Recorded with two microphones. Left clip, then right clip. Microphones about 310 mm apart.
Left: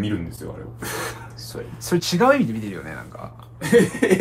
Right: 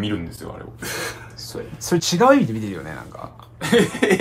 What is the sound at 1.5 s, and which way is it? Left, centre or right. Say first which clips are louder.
Speech: right 2 dB; right.